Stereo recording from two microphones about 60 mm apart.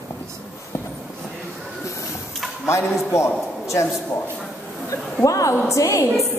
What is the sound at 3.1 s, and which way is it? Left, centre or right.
Speech, left.